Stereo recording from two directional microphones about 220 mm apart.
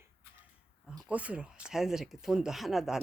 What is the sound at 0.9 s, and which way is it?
A woman's voice, 5° right (ahead or behind).